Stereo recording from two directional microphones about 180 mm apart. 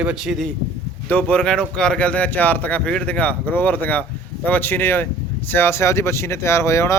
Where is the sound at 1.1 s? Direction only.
10° left (ahead or behind).